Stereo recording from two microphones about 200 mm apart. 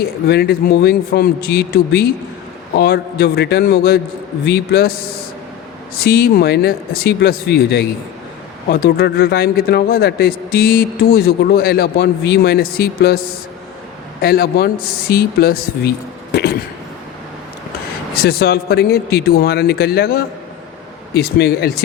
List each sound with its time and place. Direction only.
0.3 s a man's voice: 50° left (ahead or behind)
16.3 s a sound: 50° left (ahead or behind)
18.1 s a man's voice: 50° left (ahead or behind)